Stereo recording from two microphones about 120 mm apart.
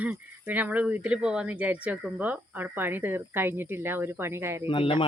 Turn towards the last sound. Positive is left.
turn(degrees=45)  # may be behind; listen again after turning